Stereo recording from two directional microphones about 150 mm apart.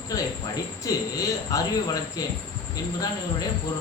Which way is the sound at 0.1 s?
25° left (ahead or behind).